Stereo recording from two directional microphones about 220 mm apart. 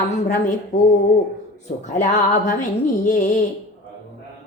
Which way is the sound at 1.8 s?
35° left (ahead or behind).